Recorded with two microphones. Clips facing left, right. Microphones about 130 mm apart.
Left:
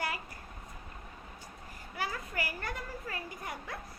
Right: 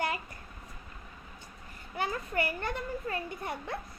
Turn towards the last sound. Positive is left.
turn(degrees=-25)  # may be behind; listen again after turning